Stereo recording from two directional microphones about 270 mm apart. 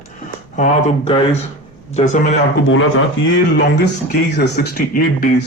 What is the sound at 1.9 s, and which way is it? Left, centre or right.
Speech, left.